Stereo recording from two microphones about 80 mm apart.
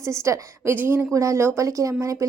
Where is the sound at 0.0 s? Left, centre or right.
Right.